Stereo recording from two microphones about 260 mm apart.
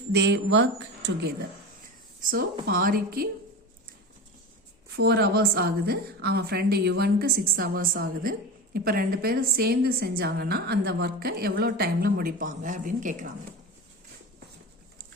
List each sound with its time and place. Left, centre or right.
0.1 s a woman's voice: right
2.3 s a woman's voice: right
4.9 s a woman's voice: right